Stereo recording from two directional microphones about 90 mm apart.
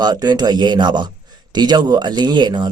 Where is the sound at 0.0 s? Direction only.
50° right (ahead or behind).